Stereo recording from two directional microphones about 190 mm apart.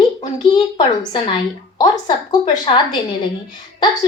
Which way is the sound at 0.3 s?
20° left (ahead or behind).